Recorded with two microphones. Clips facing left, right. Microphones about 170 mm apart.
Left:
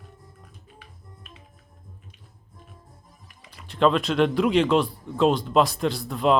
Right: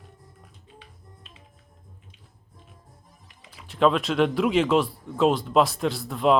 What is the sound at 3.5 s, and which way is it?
Speech, centre (ahead or behind).